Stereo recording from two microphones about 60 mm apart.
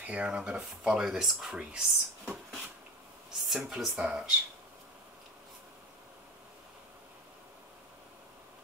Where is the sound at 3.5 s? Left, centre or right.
Centre.